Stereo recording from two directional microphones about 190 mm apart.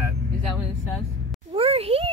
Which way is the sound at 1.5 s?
30° right (ahead or behind).